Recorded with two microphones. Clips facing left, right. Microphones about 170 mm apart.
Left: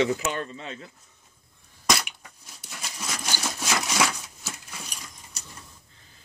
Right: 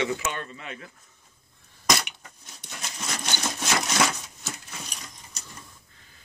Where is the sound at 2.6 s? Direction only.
5° left (ahead or behind).